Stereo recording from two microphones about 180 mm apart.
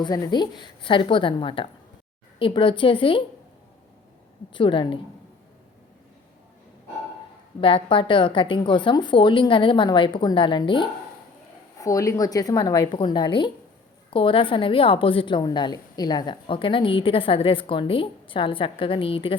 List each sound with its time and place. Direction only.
0.0 s a woman's voice: 20° left (ahead or behind)
4.5 s a woman's voice: 25° left (ahead or behind)
7.6 s a woman's voice: 25° left (ahead or behind)